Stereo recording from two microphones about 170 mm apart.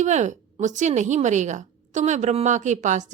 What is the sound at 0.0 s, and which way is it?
Speech, 45° right (ahead or behind).